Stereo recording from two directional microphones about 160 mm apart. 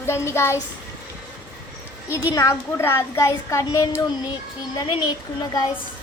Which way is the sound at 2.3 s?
20° left (ahead or behind).